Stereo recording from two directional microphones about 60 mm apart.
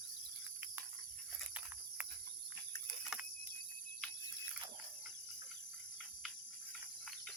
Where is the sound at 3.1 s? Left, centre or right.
Centre.